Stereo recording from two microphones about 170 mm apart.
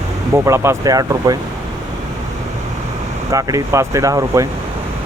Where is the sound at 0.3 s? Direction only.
15° right (ahead or behind).